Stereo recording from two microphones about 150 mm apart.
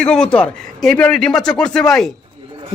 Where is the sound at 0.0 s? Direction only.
5° left (ahead or behind).